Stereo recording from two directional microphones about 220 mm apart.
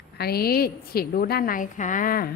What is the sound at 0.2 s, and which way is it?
A woman's voice, 45° left (ahead or behind).